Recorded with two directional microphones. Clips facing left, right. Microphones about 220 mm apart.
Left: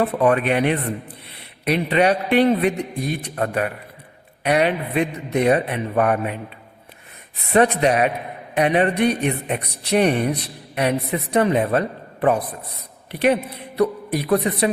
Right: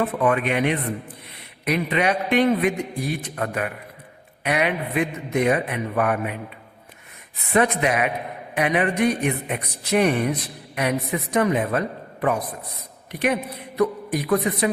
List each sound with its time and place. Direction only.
0.0 s speech: 35° left (ahead or behind)
7.5 s speech: 35° left (ahead or behind)